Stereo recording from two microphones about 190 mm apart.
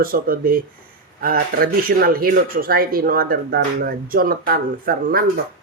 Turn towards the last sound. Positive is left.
turn(degrees=-50)  # may be behind; listen again after turning